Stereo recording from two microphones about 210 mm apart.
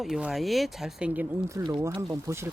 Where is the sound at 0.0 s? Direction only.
Centre (ahead or behind).